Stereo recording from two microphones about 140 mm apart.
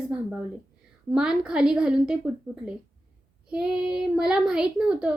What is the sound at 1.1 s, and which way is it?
A woman's voice, 5° right (ahead or behind).